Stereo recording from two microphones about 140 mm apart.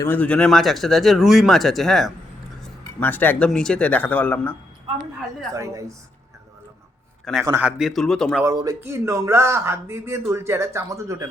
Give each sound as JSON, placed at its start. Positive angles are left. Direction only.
{"t": 0.0, "sound": "speech", "side_deg": 10}
{"t": 3.0, "sound": "speech", "side_deg": 15}
{"t": 5.5, "sound": "speech", "side_deg": -20}
{"t": 7.3, "sound": "speech", "side_deg": 5}
{"t": 8.4, "sound": "speech", "side_deg": -25}